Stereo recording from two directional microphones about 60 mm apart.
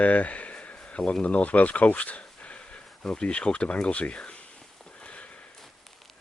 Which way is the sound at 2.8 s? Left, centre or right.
Centre.